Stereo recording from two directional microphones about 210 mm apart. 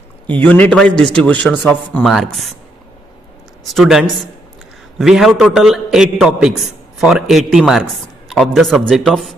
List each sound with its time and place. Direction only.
0.3 s a man's voice: 5° left (ahead or behind)
3.7 s a man's voice: centre (ahead or behind)